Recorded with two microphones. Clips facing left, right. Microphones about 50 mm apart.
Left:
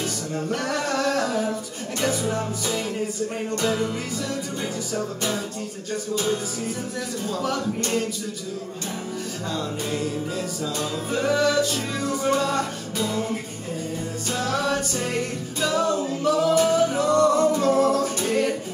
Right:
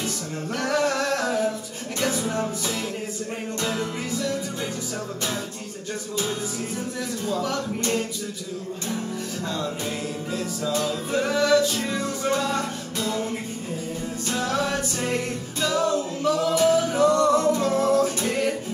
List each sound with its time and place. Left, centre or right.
0.0 s music: centre
7.2 s music: centre
9.5 s music: centre